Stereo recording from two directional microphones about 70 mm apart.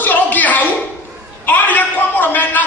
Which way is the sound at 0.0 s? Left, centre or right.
Left.